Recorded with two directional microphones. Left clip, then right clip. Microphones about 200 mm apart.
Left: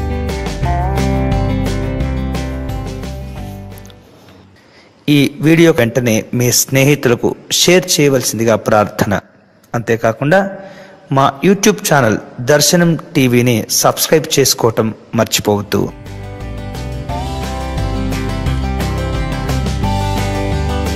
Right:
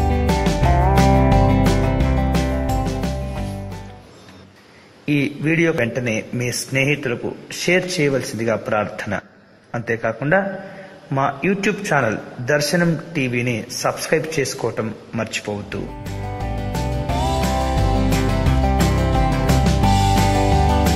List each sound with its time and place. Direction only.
0.0 s music: centre (ahead or behind)
5.2 s a man's voice: 30° left (ahead or behind)
16.3 s music: centre (ahead or behind)